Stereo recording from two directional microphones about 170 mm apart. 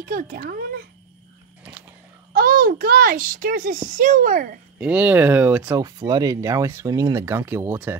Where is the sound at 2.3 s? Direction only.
60° right (ahead or behind).